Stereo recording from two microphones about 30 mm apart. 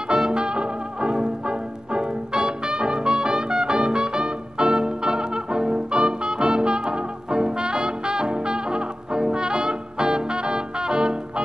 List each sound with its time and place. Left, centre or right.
0.3 s music: right